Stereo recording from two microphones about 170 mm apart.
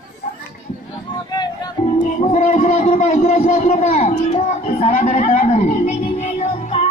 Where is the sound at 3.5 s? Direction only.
40° left (ahead or behind).